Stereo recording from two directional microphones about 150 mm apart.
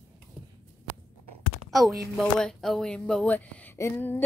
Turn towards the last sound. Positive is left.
turn(degrees=15)  # may be behind; listen again after turning